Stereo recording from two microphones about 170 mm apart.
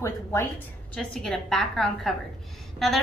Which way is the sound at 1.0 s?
5° left (ahead or behind).